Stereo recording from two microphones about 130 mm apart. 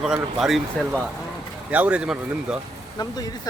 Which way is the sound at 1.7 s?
10° right (ahead or behind).